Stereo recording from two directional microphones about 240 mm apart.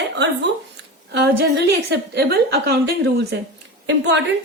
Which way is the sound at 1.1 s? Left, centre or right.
Right.